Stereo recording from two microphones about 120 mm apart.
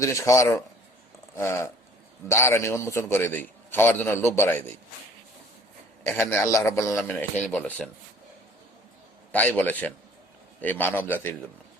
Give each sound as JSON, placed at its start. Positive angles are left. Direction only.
{"t": 0.0, "sound": "a man's voice", "side_deg": 25}
{"t": 6.1, "sound": "a man's voice", "side_deg": 20}
{"t": 9.3, "sound": "a man's voice", "side_deg": 10}